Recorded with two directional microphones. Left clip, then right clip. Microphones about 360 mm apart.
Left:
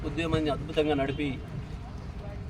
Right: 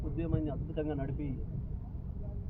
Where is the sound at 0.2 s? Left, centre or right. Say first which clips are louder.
Left 9 dB; left.